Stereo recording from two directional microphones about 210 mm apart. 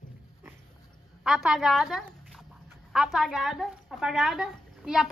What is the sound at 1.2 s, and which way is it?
Speech, centre (ahead or behind).